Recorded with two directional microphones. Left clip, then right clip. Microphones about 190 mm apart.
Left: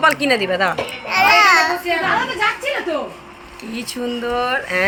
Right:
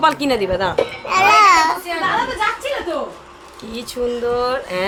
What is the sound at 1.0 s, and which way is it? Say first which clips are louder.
Music: right 1 dB; 40° right (ahead or behind).